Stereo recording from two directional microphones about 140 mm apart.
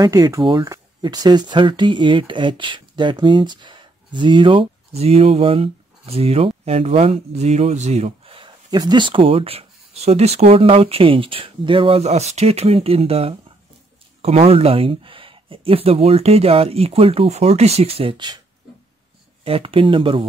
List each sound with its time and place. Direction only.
0.0 s speech: 25° right (ahead or behind)
19.4 s speech: 40° right (ahead or behind)